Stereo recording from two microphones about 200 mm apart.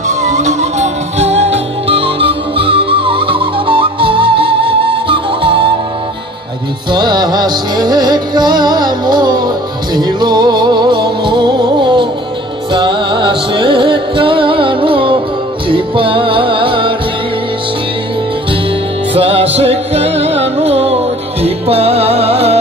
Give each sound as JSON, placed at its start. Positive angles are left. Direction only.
{"t": 0.1, "sound": "music", "side_deg": -35}
{"t": 6.9, "sound": "music", "side_deg": -20}
{"t": 19.1, "sound": "music", "side_deg": -30}